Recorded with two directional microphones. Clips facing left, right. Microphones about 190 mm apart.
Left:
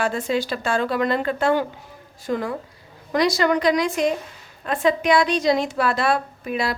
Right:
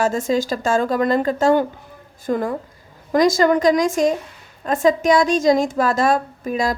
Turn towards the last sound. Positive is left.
turn(degrees=-40)  # may be behind; listen again after turning